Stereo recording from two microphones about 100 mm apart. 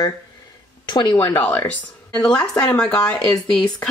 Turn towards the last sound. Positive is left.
turn(degrees=10)  # may be behind; listen again after turning